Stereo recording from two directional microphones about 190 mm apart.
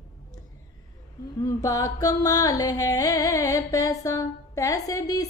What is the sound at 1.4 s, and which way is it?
Speech, 15° left (ahead or behind).